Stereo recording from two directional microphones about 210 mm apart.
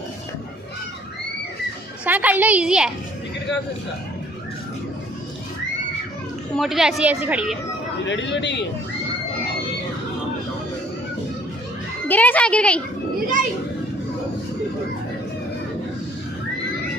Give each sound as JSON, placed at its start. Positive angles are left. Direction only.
{"t": 2.0, "sound": "a woman's voice", "side_deg": -10}
{"t": 6.5, "sound": "a woman's voice", "side_deg": 0}
{"t": 8.0, "sound": "speech", "side_deg": 60}
{"t": 12.1, "sound": "a woman's voice", "side_deg": 5}